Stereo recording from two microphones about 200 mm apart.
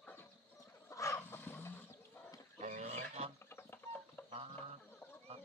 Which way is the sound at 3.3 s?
10° left (ahead or behind).